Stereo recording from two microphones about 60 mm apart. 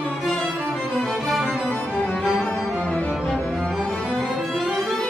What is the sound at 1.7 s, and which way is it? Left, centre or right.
Music, left.